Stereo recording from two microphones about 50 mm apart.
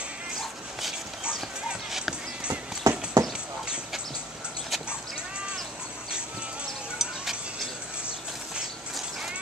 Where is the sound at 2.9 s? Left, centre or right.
Right.